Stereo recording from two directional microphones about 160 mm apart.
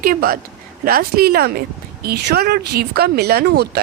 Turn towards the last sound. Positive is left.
turn(degrees=-85)